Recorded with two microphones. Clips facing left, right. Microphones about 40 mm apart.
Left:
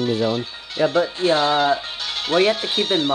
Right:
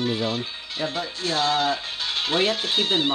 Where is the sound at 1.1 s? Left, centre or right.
Left.